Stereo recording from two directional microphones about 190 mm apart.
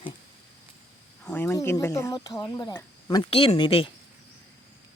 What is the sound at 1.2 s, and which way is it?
Speech, 10° left (ahead or behind).